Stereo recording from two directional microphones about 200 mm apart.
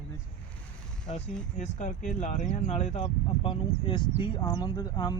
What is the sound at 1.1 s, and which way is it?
Speech, 35° left (ahead or behind).